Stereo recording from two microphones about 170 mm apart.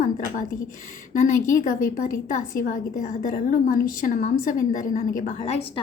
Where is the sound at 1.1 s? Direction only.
50° left (ahead or behind).